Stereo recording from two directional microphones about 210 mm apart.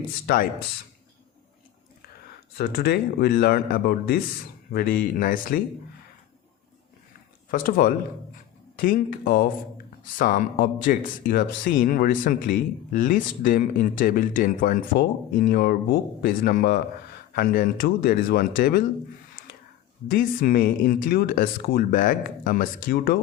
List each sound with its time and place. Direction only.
0.3 s speech: 45° left (ahead or behind)
2.6 s speech: 50° left (ahead or behind)
7.5 s speech: 40° left (ahead or behind)
20.1 s speech: 45° left (ahead or behind)